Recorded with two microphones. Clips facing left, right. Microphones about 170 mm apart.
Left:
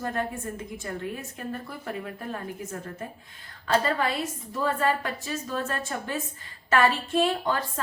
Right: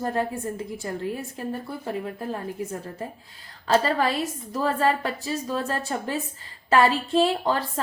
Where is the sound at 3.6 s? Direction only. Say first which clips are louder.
Right 3 dB; 30° right (ahead or behind).